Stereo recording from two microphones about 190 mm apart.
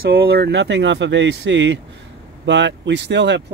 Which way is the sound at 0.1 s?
60° right (ahead or behind).